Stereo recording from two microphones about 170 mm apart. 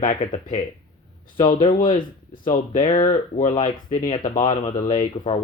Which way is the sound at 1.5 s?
30° left (ahead or behind).